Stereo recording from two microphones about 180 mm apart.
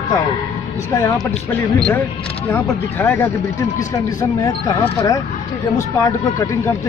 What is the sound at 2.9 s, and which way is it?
Speech, 15° left (ahead or behind).